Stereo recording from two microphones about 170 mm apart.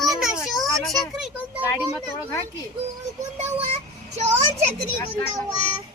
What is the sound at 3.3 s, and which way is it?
Speech, 40° right (ahead or behind).